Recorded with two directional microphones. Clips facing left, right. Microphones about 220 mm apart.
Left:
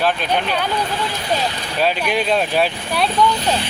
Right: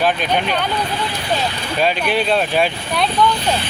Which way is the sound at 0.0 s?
Centre (ahead or behind).